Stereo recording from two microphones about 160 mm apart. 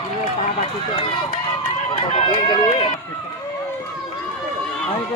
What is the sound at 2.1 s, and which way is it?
Speech, 30° left (ahead or behind).